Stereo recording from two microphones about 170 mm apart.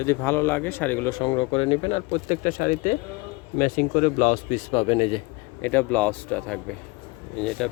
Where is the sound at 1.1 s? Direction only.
30° left (ahead or behind).